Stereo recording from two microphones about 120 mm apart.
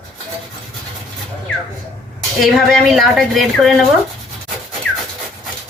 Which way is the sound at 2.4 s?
Centre (ahead or behind).